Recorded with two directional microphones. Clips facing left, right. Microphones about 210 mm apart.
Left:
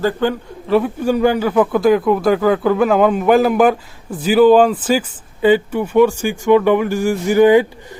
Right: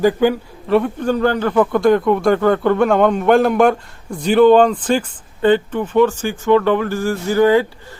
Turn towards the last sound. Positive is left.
turn(degrees=15)  # may be behind; listen again after turning